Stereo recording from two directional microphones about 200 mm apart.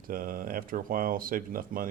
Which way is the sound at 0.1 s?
45° right (ahead or behind).